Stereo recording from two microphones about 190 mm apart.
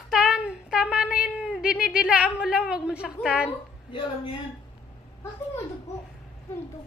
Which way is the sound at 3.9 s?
25° left (ahead or behind).